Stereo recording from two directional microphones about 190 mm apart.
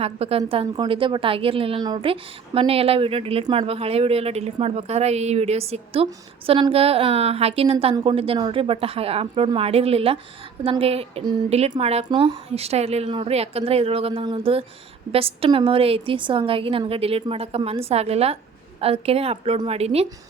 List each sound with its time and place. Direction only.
0.0 s a woman's voice: 30° right (ahead or behind)